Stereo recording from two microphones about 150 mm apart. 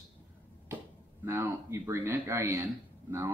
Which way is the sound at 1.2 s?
15° right (ahead or behind).